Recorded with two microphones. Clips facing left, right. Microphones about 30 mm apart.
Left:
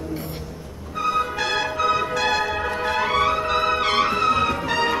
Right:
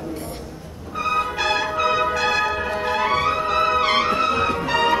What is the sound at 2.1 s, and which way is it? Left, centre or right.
Music, centre.